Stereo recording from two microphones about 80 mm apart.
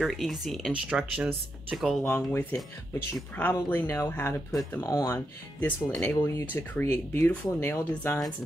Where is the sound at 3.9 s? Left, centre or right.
Left.